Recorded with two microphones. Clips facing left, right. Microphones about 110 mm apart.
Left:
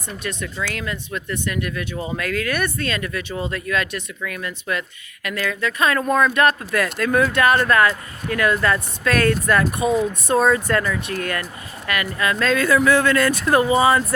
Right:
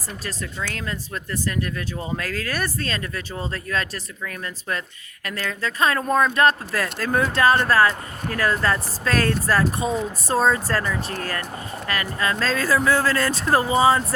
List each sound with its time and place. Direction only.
0.7 s speech: 35° right (ahead or behind)
9.8 s speech: 5° left (ahead or behind)
10.2 s speech: 30° right (ahead or behind)